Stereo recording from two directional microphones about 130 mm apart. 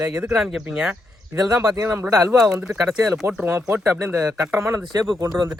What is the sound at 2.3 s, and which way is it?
Speech, 5° right (ahead or behind).